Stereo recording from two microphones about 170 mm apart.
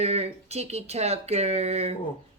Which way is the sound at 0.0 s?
40° right (ahead or behind).